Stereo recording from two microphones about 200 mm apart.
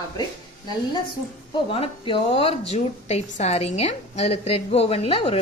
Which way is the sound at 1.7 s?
25° left (ahead or behind).